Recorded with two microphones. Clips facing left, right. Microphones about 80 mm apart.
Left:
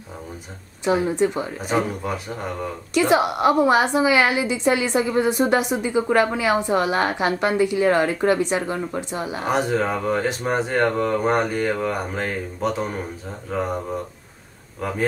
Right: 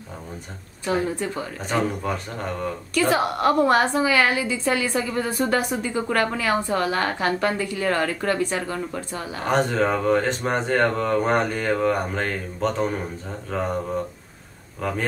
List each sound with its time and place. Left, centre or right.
0.8 s a woman's voice: centre
1.6 s a woman's voice: centre
14.8 s a woman's voice: centre